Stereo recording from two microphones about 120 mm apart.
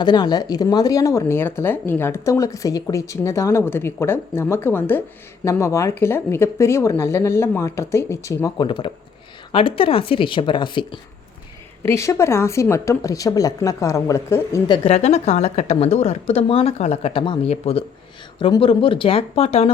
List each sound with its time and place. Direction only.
0.0 s speech: 35° left (ahead or behind)
8.5 s speech: 45° left (ahead or behind)
11.8 s speech: 20° left (ahead or behind)
14.8 s a woman's voice: 60° left (ahead or behind); by 17.4 s 45° left (ahead or behind)
17.4 s a woman's voice: 60° left (ahead or behind)